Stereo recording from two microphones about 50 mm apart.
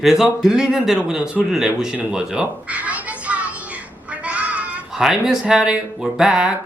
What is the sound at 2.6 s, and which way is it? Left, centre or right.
Music, right.